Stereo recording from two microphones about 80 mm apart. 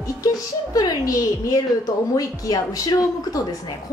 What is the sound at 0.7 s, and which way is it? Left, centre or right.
A woman's voice, left.